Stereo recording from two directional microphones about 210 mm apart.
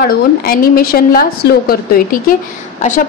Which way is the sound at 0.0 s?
45° left (ahead or behind).